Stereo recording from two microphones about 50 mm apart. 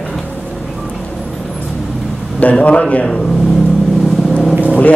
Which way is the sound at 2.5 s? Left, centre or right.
Left.